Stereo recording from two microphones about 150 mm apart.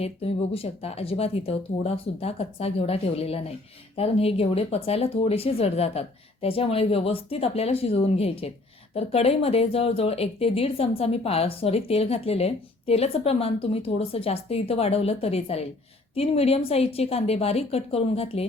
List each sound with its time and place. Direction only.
0.0 s a woman's voice: 40° left (ahead or behind)